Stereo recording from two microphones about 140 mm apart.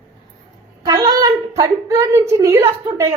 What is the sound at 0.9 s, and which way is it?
A woman's voice, 25° right (ahead or behind).